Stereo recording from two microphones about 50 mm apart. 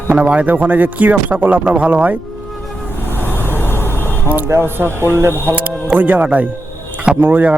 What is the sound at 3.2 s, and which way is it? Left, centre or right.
Vehicle, left.